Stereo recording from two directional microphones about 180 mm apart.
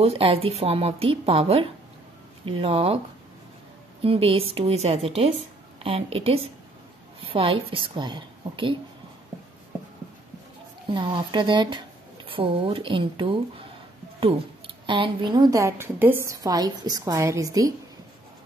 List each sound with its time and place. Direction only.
0.0 s a woman's voice: 30° right (ahead or behind)
4.0 s a woman's voice: 30° right (ahead or behind)
10.9 s speech: 25° right (ahead or behind)
14.9 s a woman's voice: 25° right (ahead or behind)